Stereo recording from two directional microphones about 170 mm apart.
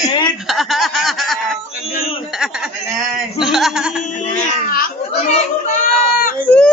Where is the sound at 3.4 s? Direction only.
Centre (ahead or behind).